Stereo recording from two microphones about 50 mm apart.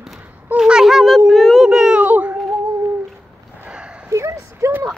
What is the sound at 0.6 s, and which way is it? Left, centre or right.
Speech, centre.